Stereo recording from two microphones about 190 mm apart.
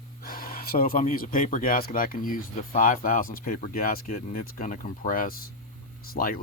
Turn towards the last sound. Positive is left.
turn(degrees=50)  # may be behind; listen again after turning